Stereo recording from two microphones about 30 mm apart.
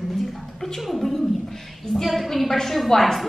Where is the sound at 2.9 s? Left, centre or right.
Centre.